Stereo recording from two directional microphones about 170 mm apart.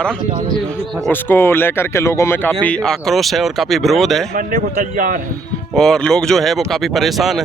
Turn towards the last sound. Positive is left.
turn(degrees=0)  # may be behind; listen again after turning